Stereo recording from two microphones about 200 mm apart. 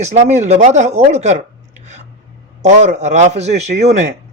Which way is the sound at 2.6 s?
35° right (ahead or behind).